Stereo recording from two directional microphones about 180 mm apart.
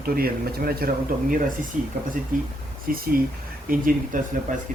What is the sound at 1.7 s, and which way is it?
Speech, 40° right (ahead or behind).